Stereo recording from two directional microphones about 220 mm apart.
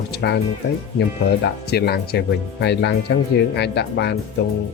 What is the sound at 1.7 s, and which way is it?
Speech, 45° left (ahead or behind).